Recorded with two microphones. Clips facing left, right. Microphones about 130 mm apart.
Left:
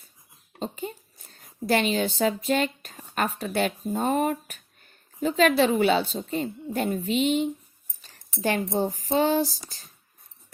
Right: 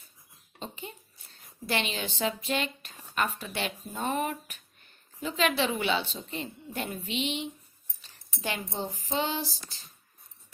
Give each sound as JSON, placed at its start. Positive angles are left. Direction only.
{"t": 0.6, "sound": "speech", "side_deg": 45}